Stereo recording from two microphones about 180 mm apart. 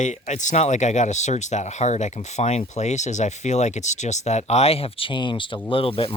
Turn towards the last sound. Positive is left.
turn(degrees=30)  # may be behind; listen again after turning